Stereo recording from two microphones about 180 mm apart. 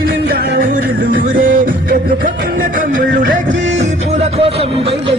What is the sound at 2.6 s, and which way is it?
Music, 50° right (ahead or behind).